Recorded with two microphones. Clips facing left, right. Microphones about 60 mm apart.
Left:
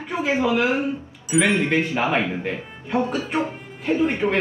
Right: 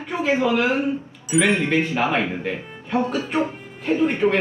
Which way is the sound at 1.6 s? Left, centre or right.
Left.